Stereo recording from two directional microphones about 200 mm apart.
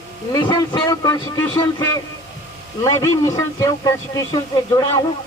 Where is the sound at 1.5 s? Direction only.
20° left (ahead or behind).